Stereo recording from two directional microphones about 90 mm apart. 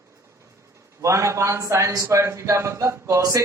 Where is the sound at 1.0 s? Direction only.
35° right (ahead or behind).